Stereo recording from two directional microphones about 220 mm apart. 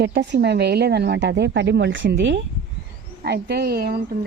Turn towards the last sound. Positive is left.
turn(degrees=-45)  # may be behind; listen again after turning